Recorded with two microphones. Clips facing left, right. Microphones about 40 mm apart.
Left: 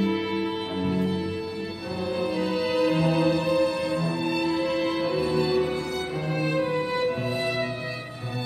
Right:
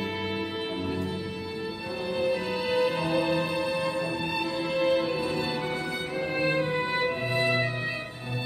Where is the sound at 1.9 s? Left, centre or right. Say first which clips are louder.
Even; centre.